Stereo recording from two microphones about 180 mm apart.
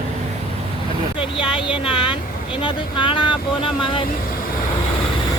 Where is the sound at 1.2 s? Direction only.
30° left (ahead or behind).